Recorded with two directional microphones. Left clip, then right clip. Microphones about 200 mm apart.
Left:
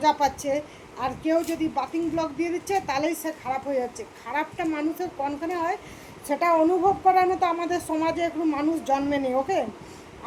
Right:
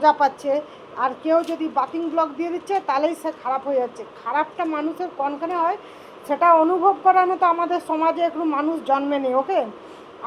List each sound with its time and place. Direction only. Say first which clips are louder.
0.0 s a woman's voice: right 5 dB; 25° left (ahead or behind)